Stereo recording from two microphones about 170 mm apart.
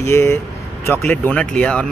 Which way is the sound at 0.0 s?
15° left (ahead or behind).